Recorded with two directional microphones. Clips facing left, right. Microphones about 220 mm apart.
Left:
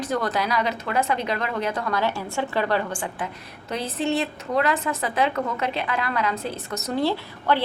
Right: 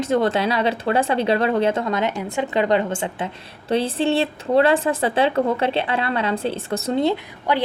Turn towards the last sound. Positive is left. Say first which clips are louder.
# right 1 dB
turn(degrees=-15)  # may be behind; listen again after turning